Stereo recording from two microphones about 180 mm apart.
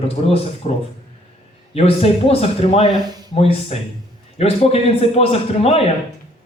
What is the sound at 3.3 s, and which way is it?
A man's voice, 35° left (ahead or behind).